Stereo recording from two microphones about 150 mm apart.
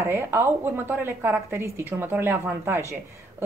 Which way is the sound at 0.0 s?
15° right (ahead or behind).